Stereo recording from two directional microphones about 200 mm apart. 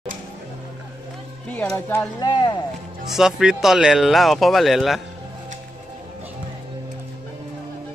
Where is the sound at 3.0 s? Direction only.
Centre (ahead or behind).